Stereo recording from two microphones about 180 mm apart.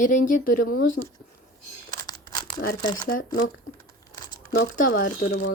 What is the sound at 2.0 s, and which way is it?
Crumpling, 25° left (ahead or behind).